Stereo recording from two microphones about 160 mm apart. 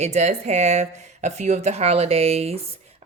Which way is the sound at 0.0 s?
45° right (ahead or behind).